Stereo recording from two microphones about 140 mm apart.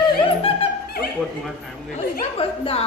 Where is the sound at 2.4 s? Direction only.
45° left (ahead or behind).